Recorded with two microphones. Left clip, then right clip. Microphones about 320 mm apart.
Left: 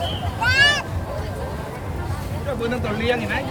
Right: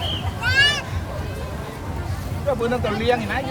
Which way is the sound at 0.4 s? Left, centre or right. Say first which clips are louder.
Left 1 dB; centre.